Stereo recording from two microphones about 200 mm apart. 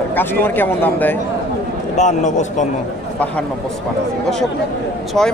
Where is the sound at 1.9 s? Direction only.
35° left (ahead or behind).